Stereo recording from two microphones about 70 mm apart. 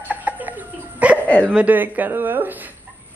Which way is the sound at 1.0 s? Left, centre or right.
Right.